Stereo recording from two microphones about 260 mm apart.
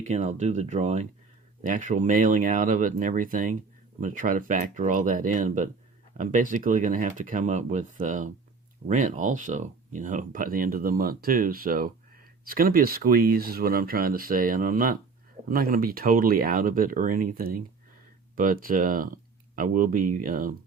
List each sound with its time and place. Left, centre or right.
0.0 s speech: right